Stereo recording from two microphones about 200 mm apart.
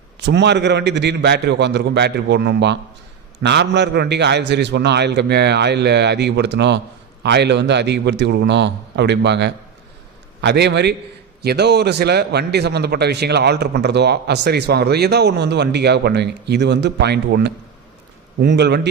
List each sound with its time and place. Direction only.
0.2 s a man's voice: 60° right (ahead or behind)